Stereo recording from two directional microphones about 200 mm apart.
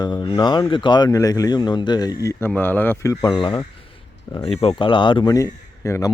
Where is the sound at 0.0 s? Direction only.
20° left (ahead or behind).